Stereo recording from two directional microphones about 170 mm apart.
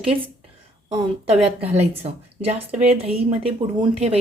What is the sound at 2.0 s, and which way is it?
A woman's voice, 35° right (ahead or behind).